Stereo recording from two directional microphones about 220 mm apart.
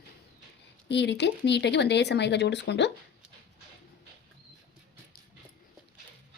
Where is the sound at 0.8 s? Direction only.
50° left (ahead or behind).